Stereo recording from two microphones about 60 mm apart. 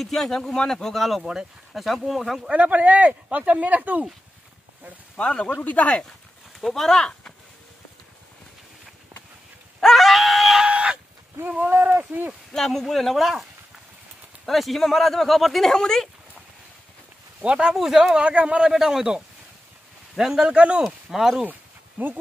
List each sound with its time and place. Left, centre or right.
0.0 s speech: centre
2.5 s speech: right
5.1 s a man's voice: centre
6.6 s speech: centre
9.8 s dog: centre
10.6 s chicken: centre
11.3 s speech: right
12.5 s speech: centre
17.4 s speech: centre
18.2 s speech: centre
18.7 s speech: centre
20.8 s speech: centre
21.5 s a sound: right